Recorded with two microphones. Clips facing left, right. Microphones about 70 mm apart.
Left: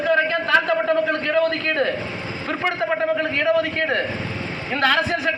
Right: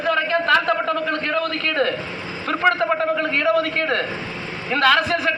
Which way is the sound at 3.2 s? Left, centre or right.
Right.